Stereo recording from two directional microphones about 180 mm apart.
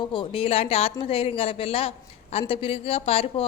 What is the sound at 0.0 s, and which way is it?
A woman's voice, 25° left (ahead or behind).